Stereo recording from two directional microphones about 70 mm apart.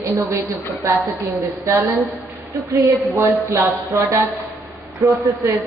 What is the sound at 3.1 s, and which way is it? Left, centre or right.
Speech, right.